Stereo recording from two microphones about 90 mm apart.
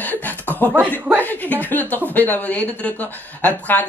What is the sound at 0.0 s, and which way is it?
Speech, 20° left (ahead or behind).